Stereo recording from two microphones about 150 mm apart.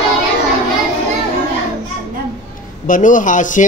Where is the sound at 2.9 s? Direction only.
60° left (ahead or behind).